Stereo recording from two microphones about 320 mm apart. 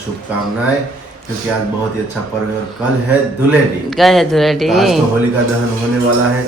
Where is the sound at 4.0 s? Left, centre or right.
Centre.